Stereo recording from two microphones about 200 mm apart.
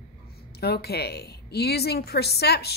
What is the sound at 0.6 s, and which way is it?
Speech, 50° left (ahead or behind).